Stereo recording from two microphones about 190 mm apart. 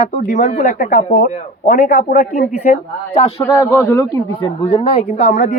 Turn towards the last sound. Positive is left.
turn(degrees=40)  # may be behind; listen again after turning